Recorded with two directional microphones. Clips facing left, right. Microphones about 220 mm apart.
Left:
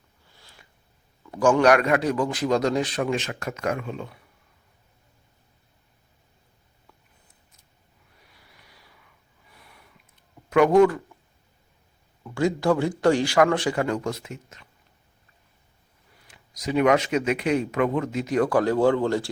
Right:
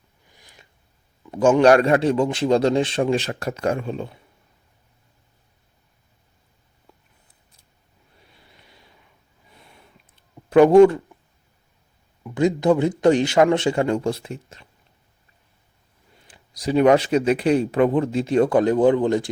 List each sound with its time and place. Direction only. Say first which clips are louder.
0.3 s a sound: right 2 dB; 15° right (ahead or behind)
1.2 s a man's voice: right 4 dB; 25° right (ahead or behind)
8.2 s a sound: right 3 dB; 25° right (ahead or behind)
9.5 s snort: right 3 dB; 25° right (ahead or behind)
10.5 s a man's voice: right 5 dB; 30° right (ahead or behind)
12.2 s a man's voice: right 4 dB; 20° right (ahead or behind)
16.1 s speech: right 3 dB; 30° right (ahead or behind)